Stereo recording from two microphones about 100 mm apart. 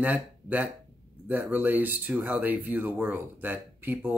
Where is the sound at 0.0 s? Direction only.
15° right (ahead or behind).